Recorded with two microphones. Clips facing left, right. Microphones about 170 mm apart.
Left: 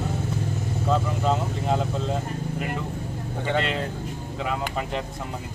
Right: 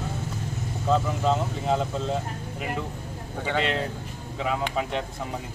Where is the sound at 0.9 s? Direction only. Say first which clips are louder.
Right 1 dB; centre (ahead or behind).